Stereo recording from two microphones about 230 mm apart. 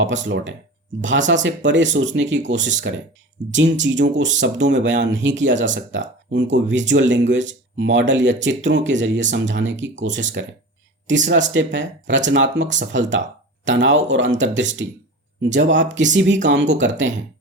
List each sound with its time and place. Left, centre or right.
0.0 s speech: right